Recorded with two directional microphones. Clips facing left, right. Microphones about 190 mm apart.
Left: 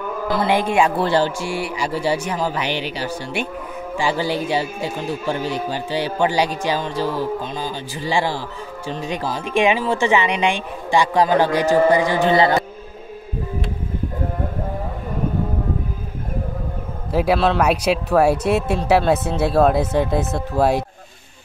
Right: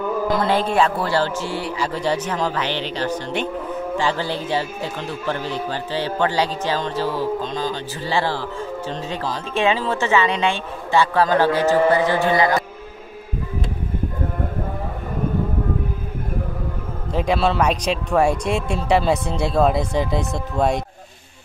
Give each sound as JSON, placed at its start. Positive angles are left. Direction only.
{"t": 0.4, "sound": "speech", "side_deg": 10}
{"t": 12.3, "sound": "music", "side_deg": 30}
{"t": 17.1, "sound": "speech", "side_deg": 5}